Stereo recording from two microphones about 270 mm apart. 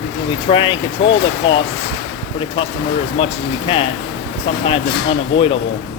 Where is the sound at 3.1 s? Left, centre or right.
Left.